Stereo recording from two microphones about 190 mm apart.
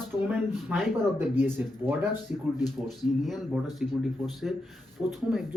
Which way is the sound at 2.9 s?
Centre (ahead or behind).